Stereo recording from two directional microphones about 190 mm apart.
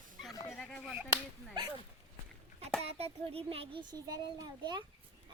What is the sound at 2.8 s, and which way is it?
A child's voice, 30° right (ahead or behind).